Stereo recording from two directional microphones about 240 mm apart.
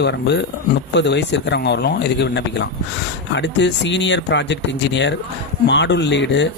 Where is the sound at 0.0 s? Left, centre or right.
Left.